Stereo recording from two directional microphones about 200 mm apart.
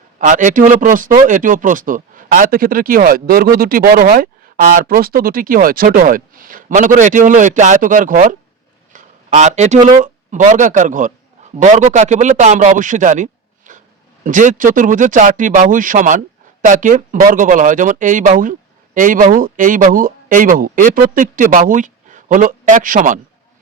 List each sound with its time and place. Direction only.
0.2 s a man's voice: 40° right (ahead or behind)